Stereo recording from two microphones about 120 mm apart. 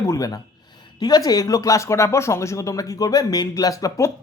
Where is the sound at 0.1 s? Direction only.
30° left (ahead or behind).